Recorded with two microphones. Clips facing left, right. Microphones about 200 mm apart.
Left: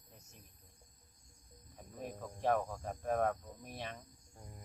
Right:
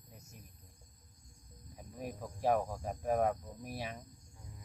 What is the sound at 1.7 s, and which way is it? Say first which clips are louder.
Cricket: right 2 dB; 10° right (ahead or behind).